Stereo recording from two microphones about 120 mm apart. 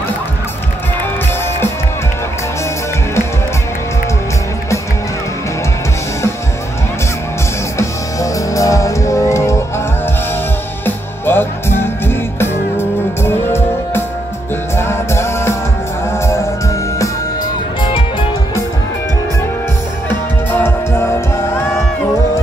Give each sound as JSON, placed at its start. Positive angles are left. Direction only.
{"t": 8.2, "sound": "music", "side_deg": 25}
{"t": 10.9, "sound": "music", "side_deg": 20}
{"t": 20.5, "sound": "music", "side_deg": 20}